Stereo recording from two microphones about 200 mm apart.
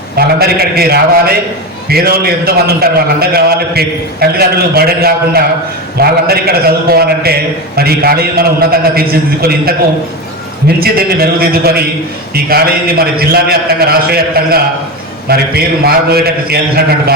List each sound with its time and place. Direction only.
0.2 s a man's voice: 50° right (ahead or behind)